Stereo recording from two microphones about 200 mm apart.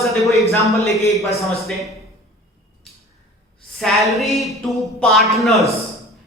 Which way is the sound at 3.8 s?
Centre (ahead or behind).